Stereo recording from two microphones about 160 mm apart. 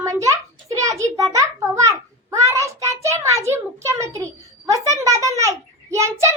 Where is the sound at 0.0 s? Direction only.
20° right (ahead or behind).